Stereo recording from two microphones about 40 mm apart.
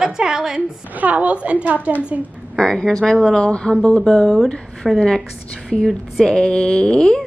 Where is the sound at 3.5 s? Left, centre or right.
Left.